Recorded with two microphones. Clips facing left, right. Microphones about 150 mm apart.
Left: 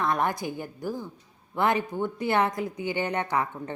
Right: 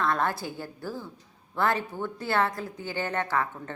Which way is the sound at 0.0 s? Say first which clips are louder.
Left 1 dB; 20° left (ahead or behind).